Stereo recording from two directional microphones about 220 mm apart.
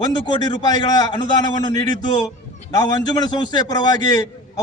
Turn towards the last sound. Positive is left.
turn(degrees=15)  # may be behind; listen again after turning